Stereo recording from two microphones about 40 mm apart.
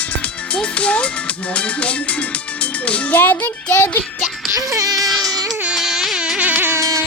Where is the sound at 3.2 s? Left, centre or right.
Left.